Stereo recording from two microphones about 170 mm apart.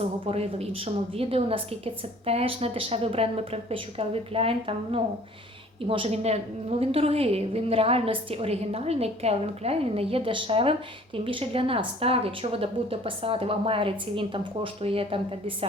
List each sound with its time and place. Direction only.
0.3 s a woman's voice: 35° right (ahead or behind)